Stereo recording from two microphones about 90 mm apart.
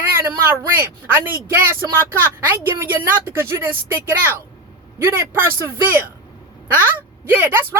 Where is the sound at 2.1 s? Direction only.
25° right (ahead or behind).